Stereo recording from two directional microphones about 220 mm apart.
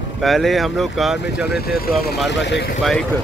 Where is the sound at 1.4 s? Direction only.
45° left (ahead or behind).